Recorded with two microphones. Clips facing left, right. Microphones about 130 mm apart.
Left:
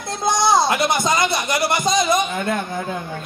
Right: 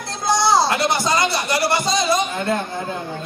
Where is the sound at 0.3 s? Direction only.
20° left (ahead or behind).